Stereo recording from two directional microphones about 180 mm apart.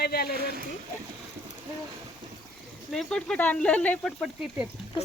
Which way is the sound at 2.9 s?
5° left (ahead or behind).